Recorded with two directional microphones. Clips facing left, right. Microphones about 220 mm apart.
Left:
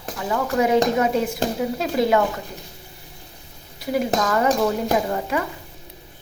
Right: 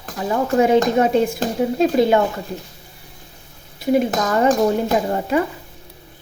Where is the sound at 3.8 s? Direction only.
25° right (ahead or behind).